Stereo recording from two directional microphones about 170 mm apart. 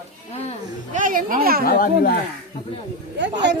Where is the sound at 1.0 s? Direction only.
55° right (ahead or behind).